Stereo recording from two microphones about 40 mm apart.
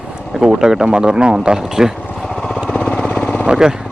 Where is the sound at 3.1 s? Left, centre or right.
Centre.